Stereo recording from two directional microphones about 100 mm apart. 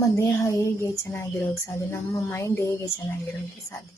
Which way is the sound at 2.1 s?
30° left (ahead or behind).